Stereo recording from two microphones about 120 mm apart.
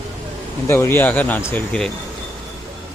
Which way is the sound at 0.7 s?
20° left (ahead or behind).